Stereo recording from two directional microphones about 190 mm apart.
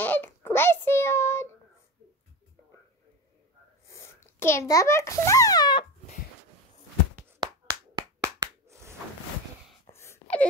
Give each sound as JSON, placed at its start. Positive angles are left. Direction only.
{"t": 0.0, "sound": "child singing", "side_deg": 10}
{"t": 3.8, "sound": "a child's voice", "side_deg": 15}
{"t": 7.9, "sound": "clapping", "side_deg": -20}
{"t": 9.8, "sound": "wail", "side_deg": 15}